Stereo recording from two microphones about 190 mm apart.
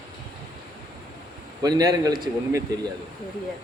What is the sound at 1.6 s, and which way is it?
A man's voice, 20° right (ahead or behind).